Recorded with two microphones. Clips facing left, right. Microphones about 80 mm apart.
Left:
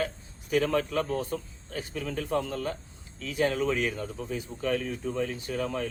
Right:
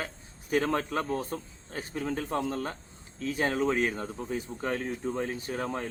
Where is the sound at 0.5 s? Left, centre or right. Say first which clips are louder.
Left 2 dB; right.